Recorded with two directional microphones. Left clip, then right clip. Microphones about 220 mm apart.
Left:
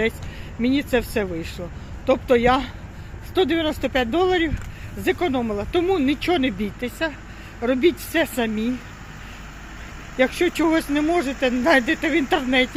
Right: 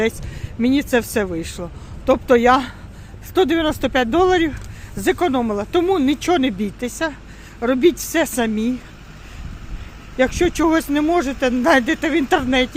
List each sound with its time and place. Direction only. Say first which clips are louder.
0.6 s speech: right 3 dB; 25° right (ahead or behind)
10.2 s speech: right 2 dB; 20° right (ahead or behind)